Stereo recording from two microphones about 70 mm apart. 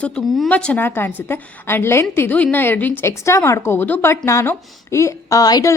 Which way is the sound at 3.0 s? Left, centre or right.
Left.